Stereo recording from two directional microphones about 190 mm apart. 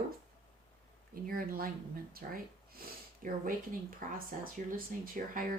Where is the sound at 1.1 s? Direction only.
50° right (ahead or behind).